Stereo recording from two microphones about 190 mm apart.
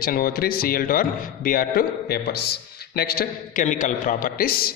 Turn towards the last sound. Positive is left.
turn(degrees=55)  # may be behind; listen again after turning